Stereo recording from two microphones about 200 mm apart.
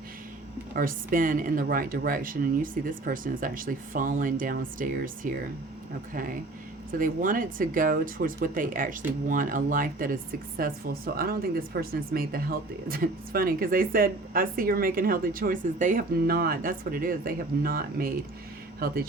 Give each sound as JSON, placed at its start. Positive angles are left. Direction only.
{"t": 0.8, "sound": "speech", "side_deg": -45}
{"t": 7.0, "sound": "speech", "side_deg": -45}